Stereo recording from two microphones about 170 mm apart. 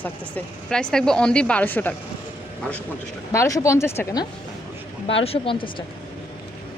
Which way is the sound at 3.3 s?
20° left (ahead or behind).